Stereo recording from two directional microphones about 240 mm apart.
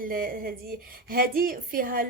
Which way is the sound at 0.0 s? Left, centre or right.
Right.